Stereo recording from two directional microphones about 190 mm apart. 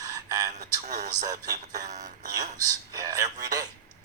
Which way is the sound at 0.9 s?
40° right (ahead or behind).